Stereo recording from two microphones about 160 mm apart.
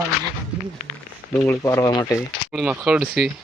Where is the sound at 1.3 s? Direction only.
20° left (ahead or behind).